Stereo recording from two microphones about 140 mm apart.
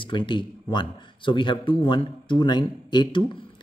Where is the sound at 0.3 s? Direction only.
35° left (ahead or behind).